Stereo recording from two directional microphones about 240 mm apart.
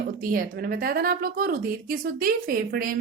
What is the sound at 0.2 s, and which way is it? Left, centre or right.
A woman's voice, right.